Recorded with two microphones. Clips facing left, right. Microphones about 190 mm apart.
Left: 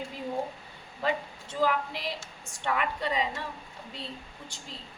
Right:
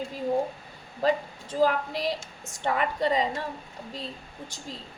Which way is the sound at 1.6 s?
40° right (ahead or behind).